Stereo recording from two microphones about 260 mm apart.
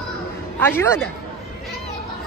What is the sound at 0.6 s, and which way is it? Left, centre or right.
Speech, centre.